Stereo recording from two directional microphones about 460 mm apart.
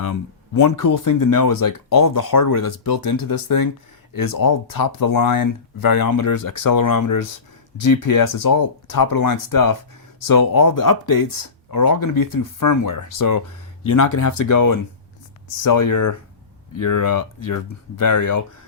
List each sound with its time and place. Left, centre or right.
0.5 s speech: left